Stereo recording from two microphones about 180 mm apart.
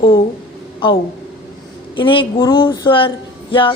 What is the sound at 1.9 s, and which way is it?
A woman's voice, 30° left (ahead or behind).